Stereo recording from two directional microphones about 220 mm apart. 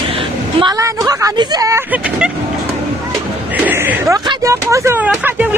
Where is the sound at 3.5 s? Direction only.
10° right (ahead or behind).